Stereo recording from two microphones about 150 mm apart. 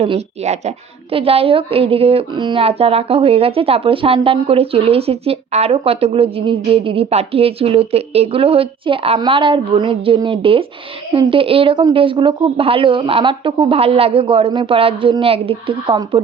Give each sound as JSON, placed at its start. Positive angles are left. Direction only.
{"t": 0.0, "sound": "a woman's voice", "side_deg": -45}